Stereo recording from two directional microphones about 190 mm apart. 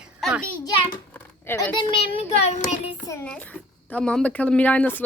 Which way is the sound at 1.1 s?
10° left (ahead or behind).